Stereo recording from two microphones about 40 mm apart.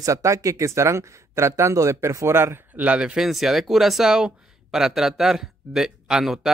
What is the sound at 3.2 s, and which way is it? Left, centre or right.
Speech, centre.